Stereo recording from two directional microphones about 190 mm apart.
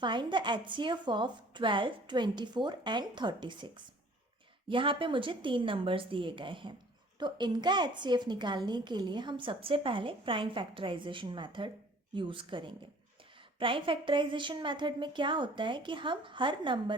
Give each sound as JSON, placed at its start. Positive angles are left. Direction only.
{"t": 0.0, "sound": "a woman's voice", "side_deg": -25}
{"t": 4.7, "sound": "a woman's voice", "side_deg": -25}